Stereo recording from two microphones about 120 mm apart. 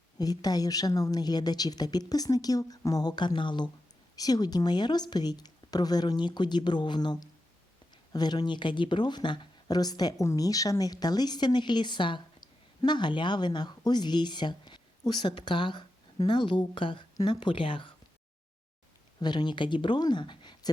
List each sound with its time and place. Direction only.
0.2 s speech: 30° left (ahead or behind)
19.2 s speech: 40° left (ahead or behind)